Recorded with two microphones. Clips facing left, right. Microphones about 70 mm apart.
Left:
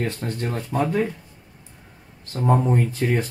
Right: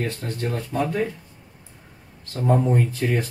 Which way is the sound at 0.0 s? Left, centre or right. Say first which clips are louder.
Left 1 dB; left.